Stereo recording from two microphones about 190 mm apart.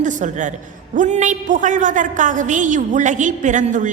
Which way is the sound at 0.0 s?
40° right (ahead or behind).